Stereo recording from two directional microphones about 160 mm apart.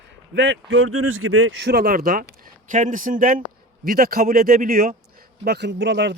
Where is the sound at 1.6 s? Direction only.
85° right; by 5.0 s 65° right (ahead or behind).